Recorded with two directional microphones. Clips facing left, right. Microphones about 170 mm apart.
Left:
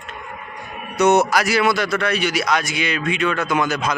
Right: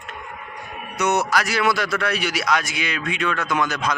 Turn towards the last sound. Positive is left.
turn(degrees=5)  # may be behind; listen again after turning